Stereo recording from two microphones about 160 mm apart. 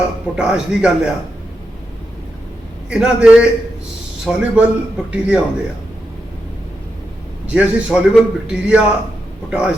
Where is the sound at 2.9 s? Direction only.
5° right (ahead or behind).